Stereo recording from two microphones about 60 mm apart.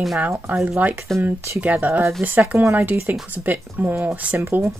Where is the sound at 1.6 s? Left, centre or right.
Right.